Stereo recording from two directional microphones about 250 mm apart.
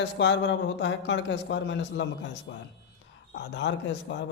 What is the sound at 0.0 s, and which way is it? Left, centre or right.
Speech, left.